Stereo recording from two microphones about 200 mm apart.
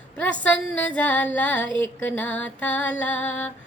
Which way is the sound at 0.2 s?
5° left (ahead or behind).